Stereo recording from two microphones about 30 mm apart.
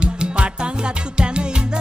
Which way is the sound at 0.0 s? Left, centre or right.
Right.